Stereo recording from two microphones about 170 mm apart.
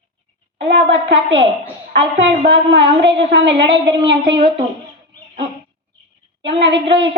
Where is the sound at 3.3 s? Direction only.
90° right.